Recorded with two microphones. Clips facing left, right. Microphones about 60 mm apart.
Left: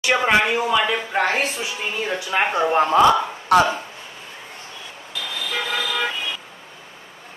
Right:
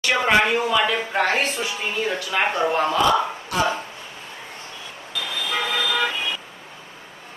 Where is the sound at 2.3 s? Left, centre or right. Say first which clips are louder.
Left 3 dB; left.